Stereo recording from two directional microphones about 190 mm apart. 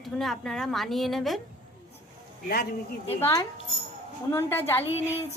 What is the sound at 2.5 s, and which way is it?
Speech, 55° left (ahead or behind).